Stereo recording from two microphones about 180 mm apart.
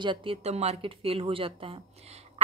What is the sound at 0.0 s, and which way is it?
A woman's voice, 25° right (ahead or behind).